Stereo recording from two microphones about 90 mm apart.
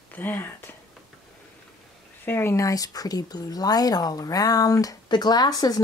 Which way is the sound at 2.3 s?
30° left (ahead or behind).